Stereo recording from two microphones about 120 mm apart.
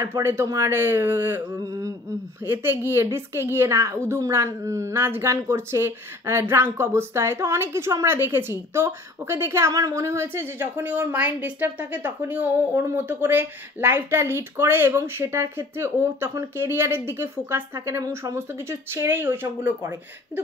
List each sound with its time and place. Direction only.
0.0 s speech: 20° right (ahead or behind)